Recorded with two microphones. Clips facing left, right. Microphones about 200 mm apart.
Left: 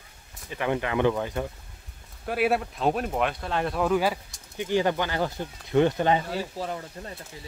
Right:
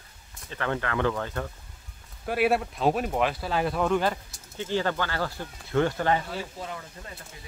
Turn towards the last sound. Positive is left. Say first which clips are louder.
# left 5 dB
turn(degrees=35)  # may be behind; listen again after turning